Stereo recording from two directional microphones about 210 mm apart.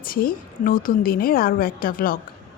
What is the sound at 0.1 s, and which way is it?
Speech, 45° left (ahead or behind).